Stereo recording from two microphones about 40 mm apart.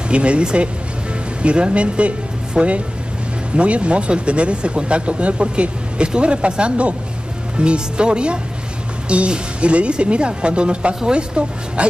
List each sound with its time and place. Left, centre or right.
0.1 s speech: right